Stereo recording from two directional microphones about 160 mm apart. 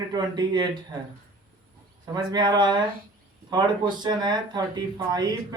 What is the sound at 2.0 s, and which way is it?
Speech, 25° right (ahead or behind).